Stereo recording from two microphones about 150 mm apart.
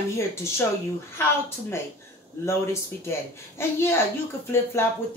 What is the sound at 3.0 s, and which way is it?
Speech, 15° left (ahead or behind).